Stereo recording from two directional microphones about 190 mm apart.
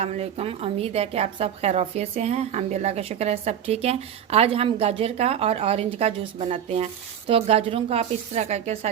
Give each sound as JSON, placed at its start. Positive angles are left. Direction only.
{"t": 0.0, "sound": "a woman's voice", "side_deg": -30}